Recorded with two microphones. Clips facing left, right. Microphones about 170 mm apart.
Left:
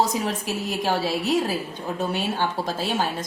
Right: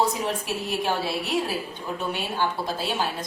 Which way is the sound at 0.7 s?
40° left (ahead or behind).